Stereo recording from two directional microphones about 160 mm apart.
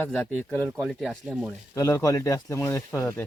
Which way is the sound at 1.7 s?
20° left (ahead or behind).